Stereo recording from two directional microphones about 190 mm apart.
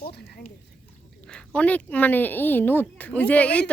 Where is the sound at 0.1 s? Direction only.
60° left (ahead or behind).